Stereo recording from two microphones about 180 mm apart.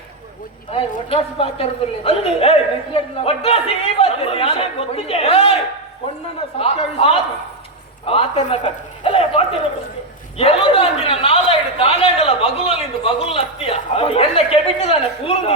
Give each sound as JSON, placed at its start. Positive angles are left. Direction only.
{"t": 0.7, "sound": "a woman's voice", "side_deg": 35}
{"t": 6.6, "sound": "a woman's voice", "side_deg": 35}